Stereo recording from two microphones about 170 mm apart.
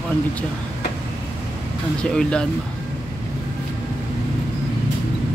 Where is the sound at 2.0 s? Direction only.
5° left (ahead or behind).